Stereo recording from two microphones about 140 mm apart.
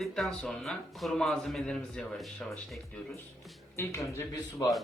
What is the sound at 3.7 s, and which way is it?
Speech, 20° left (ahead or behind).